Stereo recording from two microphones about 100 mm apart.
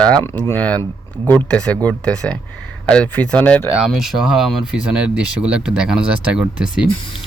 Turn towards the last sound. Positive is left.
turn(degrees=-10)  # may be behind; listen again after turning